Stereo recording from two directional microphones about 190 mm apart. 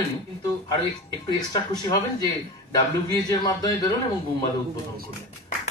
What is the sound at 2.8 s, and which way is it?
Speech, 20° left (ahead or behind).